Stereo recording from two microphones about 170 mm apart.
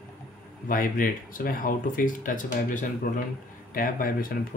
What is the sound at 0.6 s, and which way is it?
Speech, 55° left (ahead or behind).